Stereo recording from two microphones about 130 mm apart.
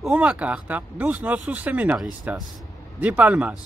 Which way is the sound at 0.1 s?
10° right (ahead or behind).